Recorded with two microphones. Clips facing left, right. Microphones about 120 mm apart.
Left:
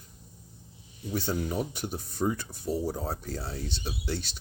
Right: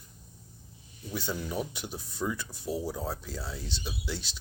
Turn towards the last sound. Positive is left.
turn(degrees=55)  # may be behind; listen again after turning